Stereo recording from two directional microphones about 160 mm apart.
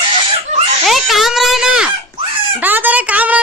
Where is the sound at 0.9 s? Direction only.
Centre (ahead or behind).